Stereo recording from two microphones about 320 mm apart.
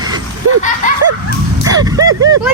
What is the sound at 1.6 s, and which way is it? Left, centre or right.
Speech, centre.